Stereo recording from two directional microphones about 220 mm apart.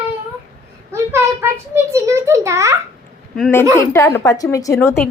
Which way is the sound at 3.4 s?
Centre (ahead or behind).